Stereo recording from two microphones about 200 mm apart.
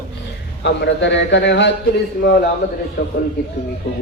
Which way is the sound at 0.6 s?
60° left (ahead or behind).